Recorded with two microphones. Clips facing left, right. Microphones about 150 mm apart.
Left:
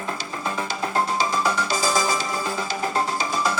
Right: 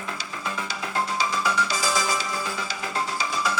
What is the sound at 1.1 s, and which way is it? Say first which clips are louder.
Music: left 2 dB; 50° left (ahead or behind).